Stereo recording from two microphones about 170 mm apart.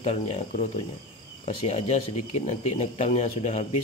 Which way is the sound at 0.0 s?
35° left (ahead or behind).